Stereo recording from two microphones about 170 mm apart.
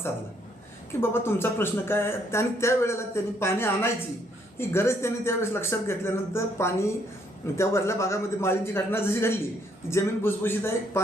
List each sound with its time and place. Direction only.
1.0 s speech: 15° left (ahead or behind)